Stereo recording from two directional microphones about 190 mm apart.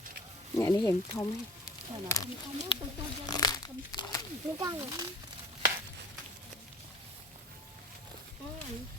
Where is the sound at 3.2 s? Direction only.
20° left (ahead or behind).